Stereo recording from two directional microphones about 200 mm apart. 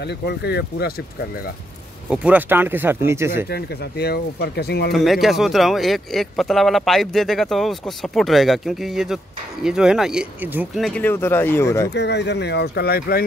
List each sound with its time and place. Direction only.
0.0 s speech: 55° left (ahead or behind)
2.0 s speech: 5° right (ahead or behind)
3.4 s speech: 55° left (ahead or behind)
4.9 s speech: centre (ahead or behind)
10.8 s speech: 5° left (ahead or behind)
11.9 s speech: 60° left (ahead or behind)